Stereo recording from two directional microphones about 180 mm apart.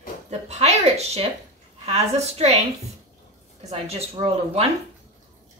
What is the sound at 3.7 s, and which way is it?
Speech, 35° right (ahead or behind).